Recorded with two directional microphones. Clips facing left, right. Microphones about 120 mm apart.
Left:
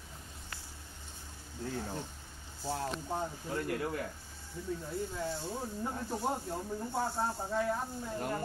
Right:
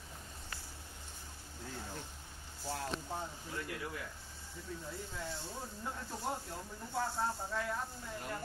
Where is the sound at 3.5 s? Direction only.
50° left (ahead or behind).